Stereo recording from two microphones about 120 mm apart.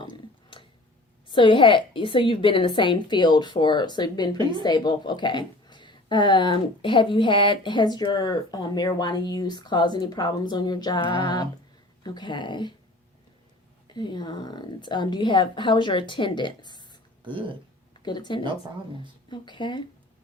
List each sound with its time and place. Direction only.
0.5 s a sound: 45° left (ahead or behind)
1.3 s a woman's voice: 45° left (ahead or behind)
13.8 s a woman's voice: 40° left (ahead or behind)
17.2 s speech: 45° right (ahead or behind)
18.0 s a woman's voice: 35° left (ahead or behind)